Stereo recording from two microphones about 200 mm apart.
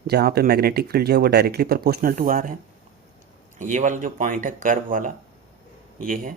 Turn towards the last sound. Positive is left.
turn(degrees=-45)  # may be behind; listen again after turning